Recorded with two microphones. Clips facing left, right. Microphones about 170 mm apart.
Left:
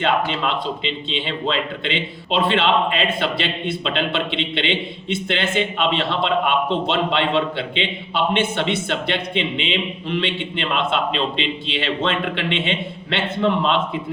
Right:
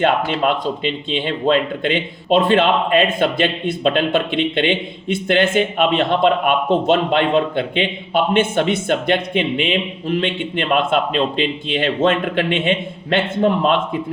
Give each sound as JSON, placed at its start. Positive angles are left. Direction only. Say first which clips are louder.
{"t": 0.0, "sound": "speech", "louder": "right 4 dB", "side_deg": -50}